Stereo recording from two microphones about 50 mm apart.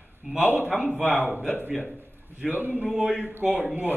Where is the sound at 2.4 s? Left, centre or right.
Right.